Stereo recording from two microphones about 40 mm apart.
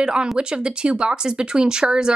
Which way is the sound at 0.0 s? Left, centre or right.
Right.